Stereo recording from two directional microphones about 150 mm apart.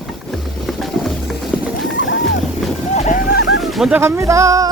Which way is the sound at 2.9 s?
55° left (ahead or behind).